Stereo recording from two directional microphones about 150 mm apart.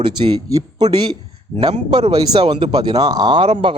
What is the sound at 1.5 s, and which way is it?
Speech, 40° right (ahead or behind).